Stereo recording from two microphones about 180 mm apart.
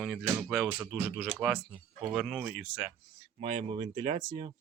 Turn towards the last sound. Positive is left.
turn(degrees=-30)  # may be behind; listen again after turning